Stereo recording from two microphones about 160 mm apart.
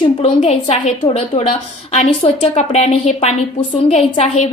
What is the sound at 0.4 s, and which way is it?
A woman's voice, 40° left (ahead or behind).